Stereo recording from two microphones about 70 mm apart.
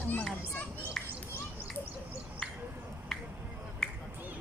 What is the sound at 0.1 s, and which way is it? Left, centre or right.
Children playing, left.